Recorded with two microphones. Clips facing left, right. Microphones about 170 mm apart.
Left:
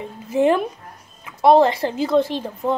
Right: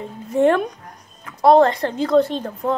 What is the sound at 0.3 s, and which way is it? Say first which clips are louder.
A woman's voice: right 1 dB; centre (ahead or behind).